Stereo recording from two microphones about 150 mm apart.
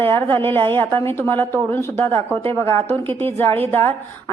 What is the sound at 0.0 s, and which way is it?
A woman's voice, 15° left (ahead or behind).